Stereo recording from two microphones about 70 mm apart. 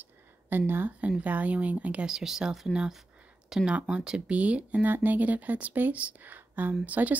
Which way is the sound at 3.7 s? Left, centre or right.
Centre.